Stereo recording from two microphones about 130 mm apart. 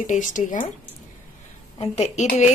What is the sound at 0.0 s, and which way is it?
Speech, 75° left (ahead or behind).